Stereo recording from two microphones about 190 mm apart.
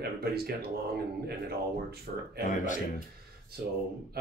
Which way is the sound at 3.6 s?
50° right (ahead or behind).